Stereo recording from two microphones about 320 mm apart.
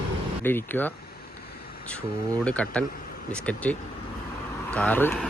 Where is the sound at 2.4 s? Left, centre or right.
Centre.